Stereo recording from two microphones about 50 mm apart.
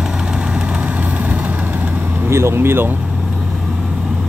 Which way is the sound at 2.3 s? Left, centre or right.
Right.